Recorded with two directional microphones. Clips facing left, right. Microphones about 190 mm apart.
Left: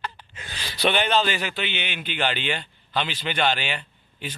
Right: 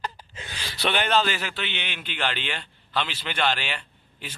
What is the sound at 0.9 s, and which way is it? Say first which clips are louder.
A man's voice: right 1 dB; centre (ahead or behind).